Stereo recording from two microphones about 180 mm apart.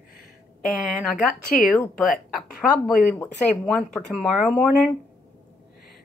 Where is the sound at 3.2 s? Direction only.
5° left (ahead or behind).